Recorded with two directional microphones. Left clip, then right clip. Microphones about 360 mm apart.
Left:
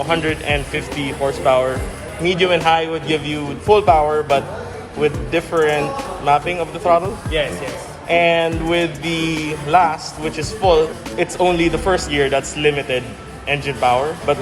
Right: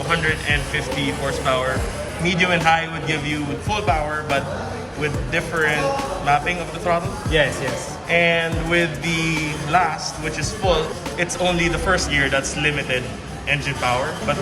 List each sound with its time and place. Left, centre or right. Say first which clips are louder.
0.1 s a man's voice: even; centre
7.3 s speech: right 2 dB; right
8.1 s a man's voice: left 3 dB; centre